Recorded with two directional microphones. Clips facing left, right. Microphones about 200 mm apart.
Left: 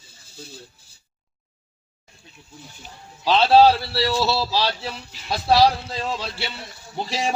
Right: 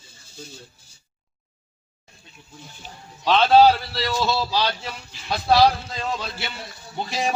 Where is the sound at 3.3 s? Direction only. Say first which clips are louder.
Even; 30° left (ahead or behind).